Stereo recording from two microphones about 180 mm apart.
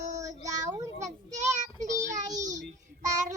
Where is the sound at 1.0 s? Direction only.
40° right (ahead or behind).